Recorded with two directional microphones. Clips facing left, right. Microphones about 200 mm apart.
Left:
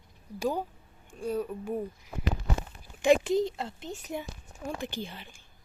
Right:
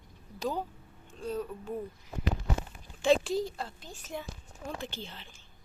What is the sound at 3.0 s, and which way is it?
A woman's voice, 15° left (ahead or behind).